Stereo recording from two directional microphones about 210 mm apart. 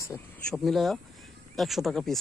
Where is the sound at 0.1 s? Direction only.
15° left (ahead or behind).